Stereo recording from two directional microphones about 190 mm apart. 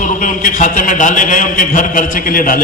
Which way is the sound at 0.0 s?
45° left (ahead or behind).